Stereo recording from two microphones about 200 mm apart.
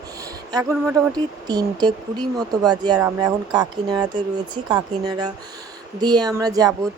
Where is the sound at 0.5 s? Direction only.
10° right (ahead or behind).